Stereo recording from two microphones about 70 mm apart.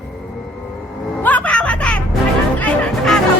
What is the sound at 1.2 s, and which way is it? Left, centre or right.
Music, left.